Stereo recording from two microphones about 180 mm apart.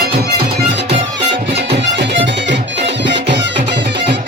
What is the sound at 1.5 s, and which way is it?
Music, 70° right (ahead or behind).